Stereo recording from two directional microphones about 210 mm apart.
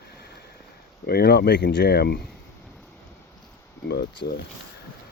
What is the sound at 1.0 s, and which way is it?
Speech, 50° left (ahead or behind).